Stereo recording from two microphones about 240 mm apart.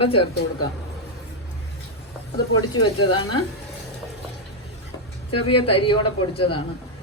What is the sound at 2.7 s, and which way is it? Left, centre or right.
Speech, left.